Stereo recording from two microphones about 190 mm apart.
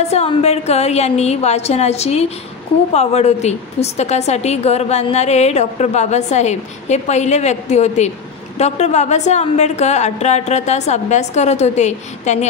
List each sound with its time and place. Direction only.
0.0 s a woman's voice: 35° left (ahead or behind)